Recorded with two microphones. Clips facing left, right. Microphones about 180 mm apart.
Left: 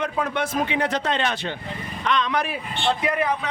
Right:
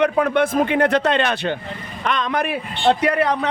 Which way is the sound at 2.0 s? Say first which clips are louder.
Right 2 dB; 50° right (ahead or behind).